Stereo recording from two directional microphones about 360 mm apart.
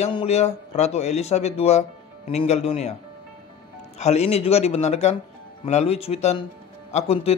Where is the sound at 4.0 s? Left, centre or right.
Centre.